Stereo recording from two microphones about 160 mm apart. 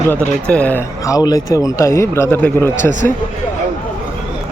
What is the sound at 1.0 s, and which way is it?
A man's voice, 20° left (ahead or behind).